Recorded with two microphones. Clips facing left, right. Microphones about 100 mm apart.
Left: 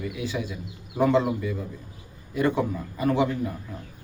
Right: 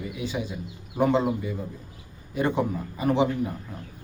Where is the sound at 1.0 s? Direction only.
20° right (ahead or behind).